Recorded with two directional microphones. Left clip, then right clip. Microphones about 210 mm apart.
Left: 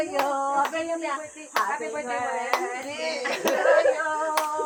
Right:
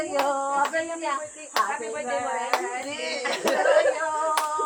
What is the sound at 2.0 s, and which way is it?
Hands, 15° left (ahead or behind).